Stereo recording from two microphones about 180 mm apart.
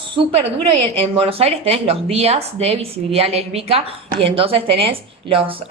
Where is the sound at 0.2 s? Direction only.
30° right (ahead or behind).